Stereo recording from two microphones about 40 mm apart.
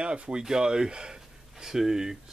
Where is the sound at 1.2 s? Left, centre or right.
Centre.